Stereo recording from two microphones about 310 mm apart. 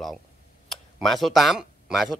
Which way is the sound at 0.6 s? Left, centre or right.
Centre.